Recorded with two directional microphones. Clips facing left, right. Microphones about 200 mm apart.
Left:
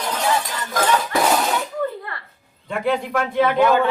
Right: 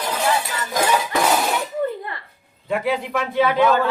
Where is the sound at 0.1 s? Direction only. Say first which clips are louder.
Even; 10° right (ahead or behind).